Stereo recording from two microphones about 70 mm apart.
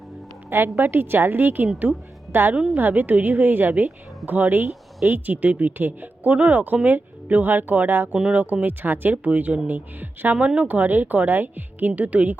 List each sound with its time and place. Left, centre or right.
0.5 s a woman's voice: right
8.1 s speech: centre
10.3 s speech: centre